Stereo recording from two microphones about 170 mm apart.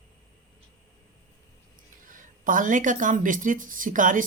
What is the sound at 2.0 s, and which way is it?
Speech, 50° right (ahead or behind).